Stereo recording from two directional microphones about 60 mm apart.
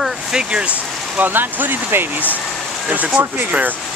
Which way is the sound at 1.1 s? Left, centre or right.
Right.